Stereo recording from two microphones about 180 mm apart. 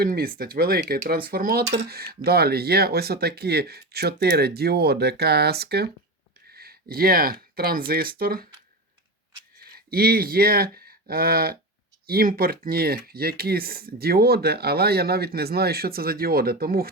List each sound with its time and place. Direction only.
0.0 s speech: 55° right (ahead or behind)
9.6 s speech: 55° right (ahead or behind)